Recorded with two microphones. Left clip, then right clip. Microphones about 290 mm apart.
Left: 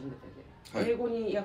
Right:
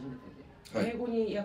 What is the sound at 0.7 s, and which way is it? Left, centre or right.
Speech, centre.